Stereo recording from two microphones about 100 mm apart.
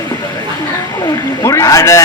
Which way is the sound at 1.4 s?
30° left (ahead or behind).